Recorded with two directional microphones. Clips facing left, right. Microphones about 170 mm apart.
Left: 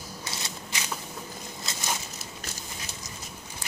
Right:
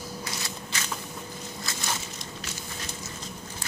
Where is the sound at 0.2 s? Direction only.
20° left (ahead or behind).